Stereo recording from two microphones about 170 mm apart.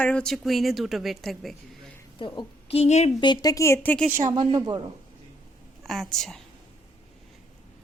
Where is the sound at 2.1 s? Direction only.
30° left (ahead or behind).